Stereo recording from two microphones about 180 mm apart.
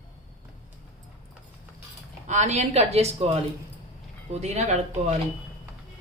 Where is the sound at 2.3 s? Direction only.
40° right (ahead or behind).